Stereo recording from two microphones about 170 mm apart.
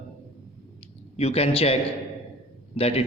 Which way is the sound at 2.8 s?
35° left (ahead or behind).